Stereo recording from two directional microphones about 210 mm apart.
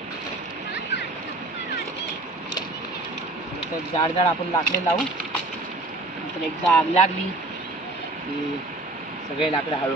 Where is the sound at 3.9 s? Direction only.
25° left (ahead or behind).